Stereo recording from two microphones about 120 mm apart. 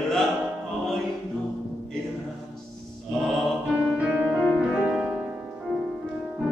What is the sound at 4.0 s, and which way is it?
Music, 10° right (ahead or behind).